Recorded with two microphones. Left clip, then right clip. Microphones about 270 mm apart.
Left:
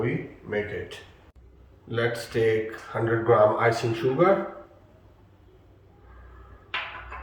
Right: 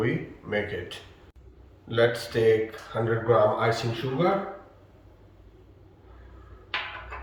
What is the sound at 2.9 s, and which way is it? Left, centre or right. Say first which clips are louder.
Speech: left 2 dB; centre.